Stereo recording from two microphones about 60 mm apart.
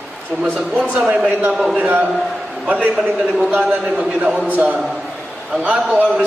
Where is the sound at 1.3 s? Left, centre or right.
Right.